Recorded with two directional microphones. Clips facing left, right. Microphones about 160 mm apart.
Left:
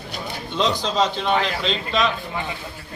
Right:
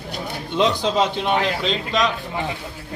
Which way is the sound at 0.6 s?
10° right (ahead or behind).